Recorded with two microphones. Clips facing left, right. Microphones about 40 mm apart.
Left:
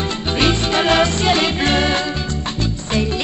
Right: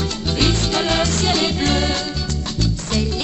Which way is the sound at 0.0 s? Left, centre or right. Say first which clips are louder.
Left 2 dB; left.